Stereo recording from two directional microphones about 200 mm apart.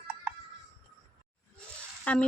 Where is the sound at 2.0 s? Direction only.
5° left (ahead or behind).